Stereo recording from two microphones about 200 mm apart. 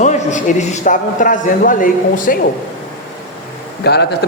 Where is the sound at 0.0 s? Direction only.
35° left (ahead or behind).